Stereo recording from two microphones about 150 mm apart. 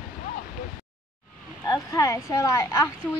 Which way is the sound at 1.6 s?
25° left (ahead or behind).